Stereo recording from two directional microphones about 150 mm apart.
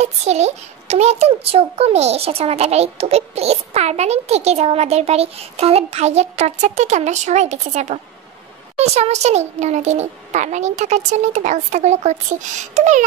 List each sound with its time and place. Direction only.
0.0 s a child's voice: 50° right (ahead or behind)